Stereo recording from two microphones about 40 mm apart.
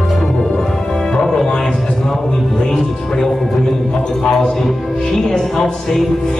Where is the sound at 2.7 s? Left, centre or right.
Centre.